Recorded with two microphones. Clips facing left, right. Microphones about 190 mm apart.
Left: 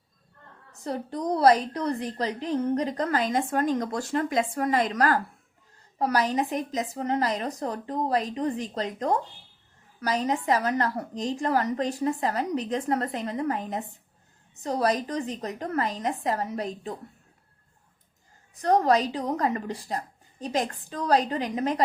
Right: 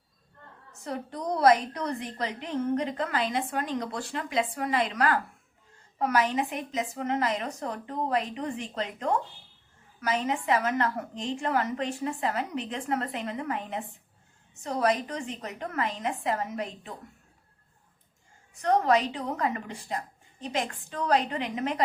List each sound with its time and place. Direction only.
0.7 s a woman's voice: 35° left (ahead or behind)
18.5 s a woman's voice: 35° left (ahead or behind)